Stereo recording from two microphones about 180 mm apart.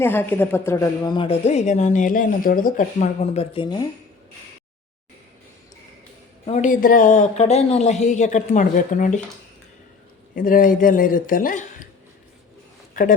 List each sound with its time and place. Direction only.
0.0 s speech: 10° left (ahead or behind)
6.4 s speech: 40° left (ahead or behind)
10.3 s speech: 50° left (ahead or behind)
12.9 s a sound: 50° left (ahead or behind)